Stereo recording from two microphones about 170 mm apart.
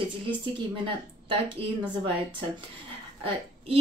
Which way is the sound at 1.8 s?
30° right (ahead or behind).